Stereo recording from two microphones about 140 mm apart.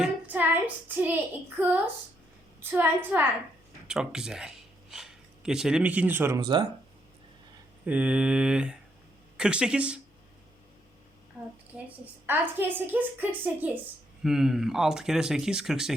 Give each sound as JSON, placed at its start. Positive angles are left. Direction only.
{"t": 0.0, "sound": "a sound", "side_deg": -10}
{"t": 0.9, "sound": "a woman's voice", "side_deg": -10}
{"t": 6.4, "sound": "speech", "side_deg": -30}
{"t": 7.9, "sound": "a woman's voice", "side_deg": -10}
{"t": 11.3, "sound": "a woman's voice", "side_deg": -15}